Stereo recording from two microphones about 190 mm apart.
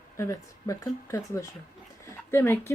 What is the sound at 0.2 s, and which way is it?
Speech, 15° left (ahead or behind).